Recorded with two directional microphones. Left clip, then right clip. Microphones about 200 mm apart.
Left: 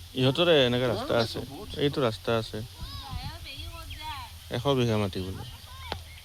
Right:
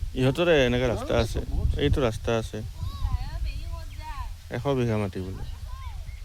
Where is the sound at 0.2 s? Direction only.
20° right (ahead or behind).